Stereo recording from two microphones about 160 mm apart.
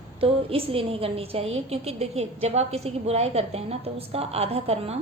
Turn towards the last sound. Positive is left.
turn(degrees=-40)  # may be behind; listen again after turning